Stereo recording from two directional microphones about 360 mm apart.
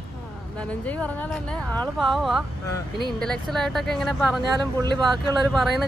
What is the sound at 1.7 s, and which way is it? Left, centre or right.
Speech, centre.